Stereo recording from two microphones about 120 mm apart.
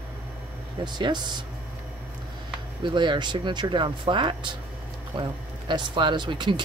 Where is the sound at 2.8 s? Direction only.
40° right (ahead or behind).